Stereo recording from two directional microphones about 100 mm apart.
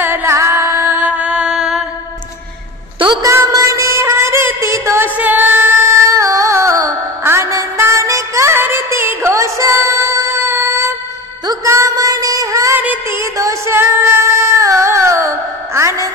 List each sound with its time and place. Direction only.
0.0 s music: 25° right (ahead or behind); by 1.9 s 5° right (ahead or behind)
3.2 s music: 30° right (ahead or behind)
5.0 s music: 15° right (ahead or behind)
5.9 s music: 30° right (ahead or behind)
11.4 s a sound: 30° right (ahead or behind)
12.7 s music: 20° right (ahead or behind)
13.2 s female singing: 30° right (ahead or behind)